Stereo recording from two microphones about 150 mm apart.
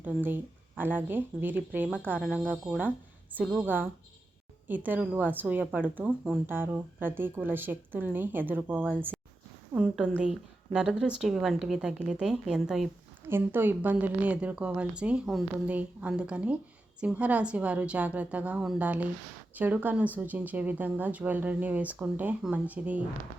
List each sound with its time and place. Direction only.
0.0 s a woman's voice: 15° right (ahead or behind)
3.6 s a woman's voice: 15° right (ahead or behind)
13.2 s a woman's voice: 15° right (ahead or behind)